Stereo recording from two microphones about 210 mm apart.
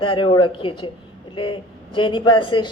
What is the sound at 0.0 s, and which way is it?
A woman's voice, 25° left (ahead or behind).